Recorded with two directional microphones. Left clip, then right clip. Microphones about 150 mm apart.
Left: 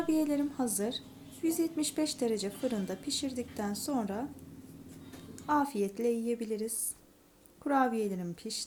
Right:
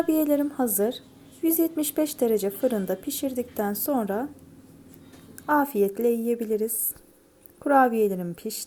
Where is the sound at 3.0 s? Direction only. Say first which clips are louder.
Right 7 dB; 20° right (ahead or behind).